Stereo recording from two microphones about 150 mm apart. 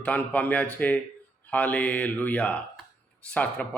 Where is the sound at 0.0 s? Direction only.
10° left (ahead or behind).